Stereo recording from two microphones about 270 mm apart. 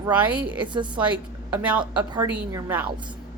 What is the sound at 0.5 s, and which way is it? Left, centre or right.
Speech, centre.